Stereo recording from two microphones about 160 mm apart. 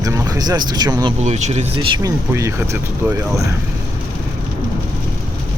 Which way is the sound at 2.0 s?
20° right (ahead or behind).